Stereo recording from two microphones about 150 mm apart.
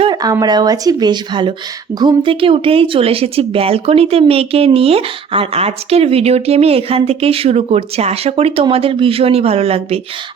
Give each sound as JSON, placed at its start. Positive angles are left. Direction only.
{"t": 0.0, "sound": "speech", "side_deg": -25}